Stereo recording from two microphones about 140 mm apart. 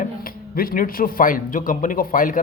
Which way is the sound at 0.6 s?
90° left.